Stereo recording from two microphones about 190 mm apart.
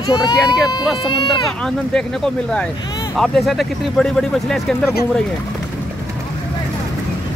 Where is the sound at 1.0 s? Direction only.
25° left (ahead or behind).